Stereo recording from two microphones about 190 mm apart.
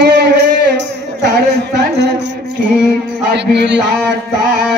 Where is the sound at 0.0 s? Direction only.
60° right (ahead or behind).